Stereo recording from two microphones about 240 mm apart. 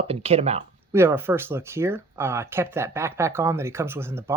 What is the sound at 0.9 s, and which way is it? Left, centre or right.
Speech, centre.